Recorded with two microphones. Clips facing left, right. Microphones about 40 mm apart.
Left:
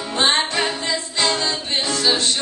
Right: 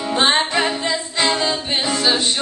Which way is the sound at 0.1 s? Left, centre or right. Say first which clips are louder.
Right 2 dB; centre.